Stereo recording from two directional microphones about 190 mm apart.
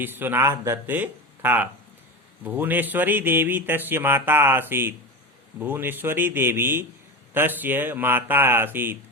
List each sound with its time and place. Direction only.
0.0 s speech: 10° right (ahead or behind)